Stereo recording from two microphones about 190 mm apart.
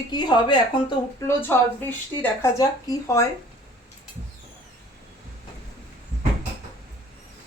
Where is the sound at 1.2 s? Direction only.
10° left (ahead or behind).